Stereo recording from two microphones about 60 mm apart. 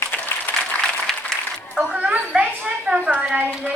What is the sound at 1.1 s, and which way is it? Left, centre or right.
Applause, centre.